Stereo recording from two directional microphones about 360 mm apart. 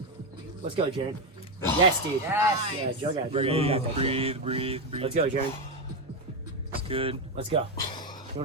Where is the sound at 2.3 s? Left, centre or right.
Centre.